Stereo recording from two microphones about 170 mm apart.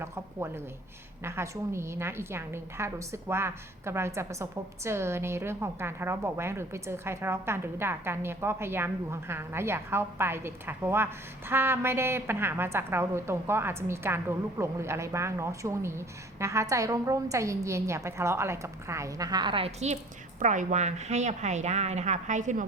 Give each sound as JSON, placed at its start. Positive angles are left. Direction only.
{"t": 0.0, "sound": "a woman's voice", "side_deg": -15}